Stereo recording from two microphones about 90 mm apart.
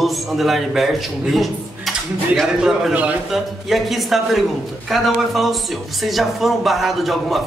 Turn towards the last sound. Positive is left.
turn(degrees=0)  # may be behind; listen again after turning